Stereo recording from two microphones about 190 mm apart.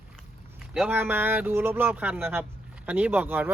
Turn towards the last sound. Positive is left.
turn(degrees=-10)  # may be behind; listen again after turning